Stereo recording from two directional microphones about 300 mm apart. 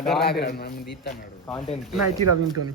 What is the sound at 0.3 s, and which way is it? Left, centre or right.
Speech, left.